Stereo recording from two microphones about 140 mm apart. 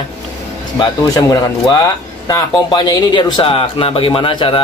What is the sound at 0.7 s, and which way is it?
Speech, 30° left (ahead or behind).